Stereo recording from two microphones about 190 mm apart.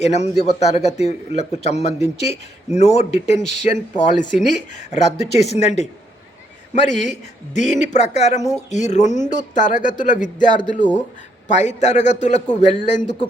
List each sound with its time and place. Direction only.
0.0 s a man's voice: 35° left (ahead or behind)